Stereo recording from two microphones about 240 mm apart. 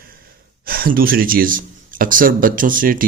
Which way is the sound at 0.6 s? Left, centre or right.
Right.